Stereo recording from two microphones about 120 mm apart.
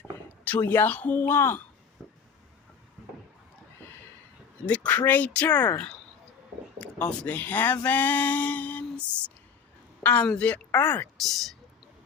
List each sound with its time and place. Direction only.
0.3 s speech: 15° left (ahead or behind)
2.0 s vehicle: centre (ahead or behind)
4.6 s speech: 10° left (ahead or behind)
6.7 s speech: 10° left (ahead or behind)
11.2 s speech: centre (ahead or behind)